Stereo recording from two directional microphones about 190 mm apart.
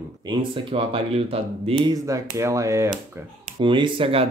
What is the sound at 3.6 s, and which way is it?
Speech, 25° right (ahead or behind).